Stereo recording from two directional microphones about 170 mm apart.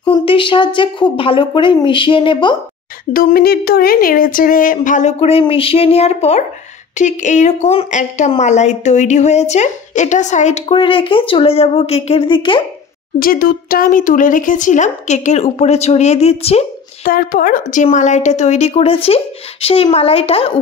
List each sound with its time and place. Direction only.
0.2 s speech: 30° left (ahead or behind)
3.1 s a woman's voice: 60° left (ahead or behind); by 10.6 s 45° left (ahead or behind)
10.7 s speech: 30° left (ahead or behind)
13.2 s a woman's voice: 60° left (ahead or behind); by 16.6 s 35° left (ahead or behind)
17.0 s a woman's voice: 55° left (ahead or behind); by 20.5 s 35° left (ahead or behind)